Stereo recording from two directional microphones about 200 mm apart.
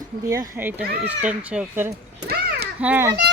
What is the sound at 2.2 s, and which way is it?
Children playing, 50° right (ahead or behind).